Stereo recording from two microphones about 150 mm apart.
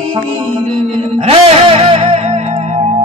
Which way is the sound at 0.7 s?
40° right (ahead or behind).